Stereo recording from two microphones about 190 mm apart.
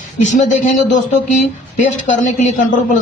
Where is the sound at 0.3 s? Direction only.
40° left (ahead or behind).